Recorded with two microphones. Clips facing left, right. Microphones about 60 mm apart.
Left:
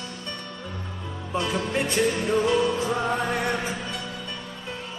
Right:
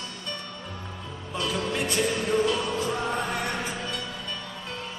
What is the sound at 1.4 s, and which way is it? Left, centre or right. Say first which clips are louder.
Music: left 2 dB; left.